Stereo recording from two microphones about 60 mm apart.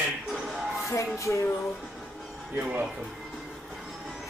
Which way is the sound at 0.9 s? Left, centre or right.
Left.